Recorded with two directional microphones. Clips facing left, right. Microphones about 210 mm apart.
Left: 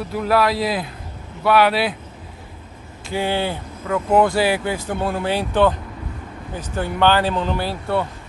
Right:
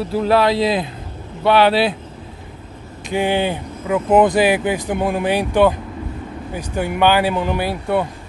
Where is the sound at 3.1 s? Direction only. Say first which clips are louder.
Right 4 dB; 15° right (ahead or behind).